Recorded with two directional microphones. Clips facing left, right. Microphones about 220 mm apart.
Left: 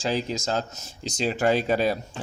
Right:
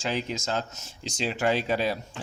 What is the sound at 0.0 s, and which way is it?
Speech, 35° left (ahead or behind).